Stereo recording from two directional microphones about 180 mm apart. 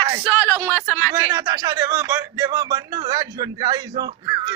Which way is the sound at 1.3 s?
20° right (ahead or behind).